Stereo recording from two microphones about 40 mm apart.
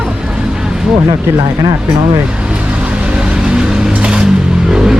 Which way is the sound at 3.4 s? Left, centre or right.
Centre.